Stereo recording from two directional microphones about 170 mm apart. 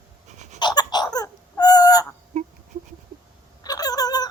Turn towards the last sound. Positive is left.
turn(degrees=20)  # may be behind; listen again after turning